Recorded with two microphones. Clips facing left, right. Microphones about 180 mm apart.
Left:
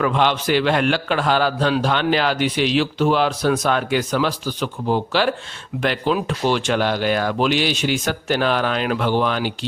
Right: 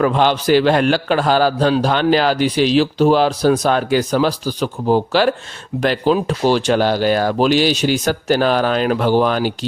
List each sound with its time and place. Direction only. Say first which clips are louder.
0.0 s a man's voice: right 4 dB; 35° right (ahead or behind)